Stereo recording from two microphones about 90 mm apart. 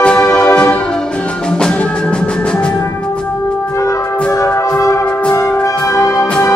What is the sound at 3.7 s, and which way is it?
Music, 35° left (ahead or behind).